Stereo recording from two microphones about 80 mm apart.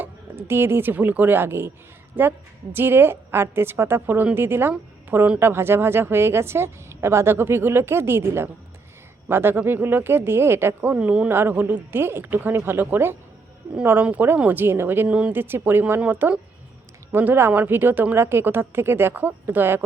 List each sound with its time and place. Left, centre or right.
0.0 s speech: right
5.1 s speech: centre
5.4 s a woman's voice: right
11.3 s speech: right
15.0 s speech: centre
15.3 s speech: right